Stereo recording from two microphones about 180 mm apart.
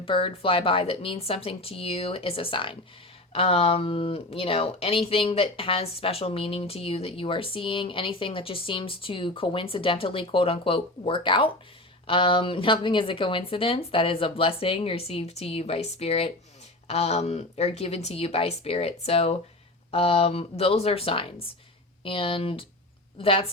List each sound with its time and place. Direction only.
0.0 s speech: 30° left (ahead or behind)